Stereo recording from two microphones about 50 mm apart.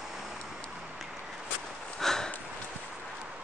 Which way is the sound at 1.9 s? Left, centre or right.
Centre.